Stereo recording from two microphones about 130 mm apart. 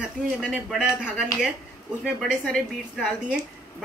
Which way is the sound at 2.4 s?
5° left (ahead or behind).